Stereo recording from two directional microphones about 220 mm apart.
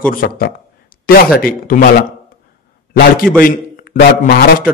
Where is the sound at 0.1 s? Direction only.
40° left (ahead or behind).